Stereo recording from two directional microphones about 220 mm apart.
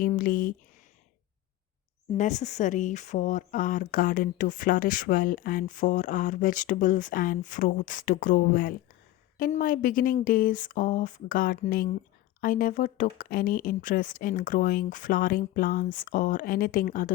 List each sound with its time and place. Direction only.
0.0 s speech: 40° left (ahead or behind)
2.1 s speech: 30° left (ahead or behind)